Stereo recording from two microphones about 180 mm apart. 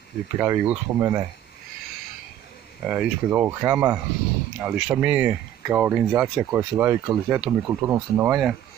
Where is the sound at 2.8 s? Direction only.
10° right (ahead or behind).